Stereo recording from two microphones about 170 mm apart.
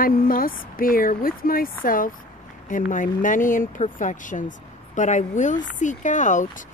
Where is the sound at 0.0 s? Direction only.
55° left (ahead or behind).